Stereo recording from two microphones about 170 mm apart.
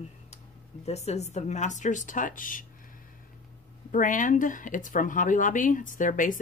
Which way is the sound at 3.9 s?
50° left (ahead or behind).